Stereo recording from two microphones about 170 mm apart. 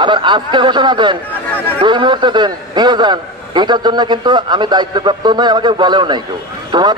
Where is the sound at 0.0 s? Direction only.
25° right (ahead or behind).